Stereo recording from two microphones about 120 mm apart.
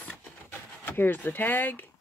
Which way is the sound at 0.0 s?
10° left (ahead or behind).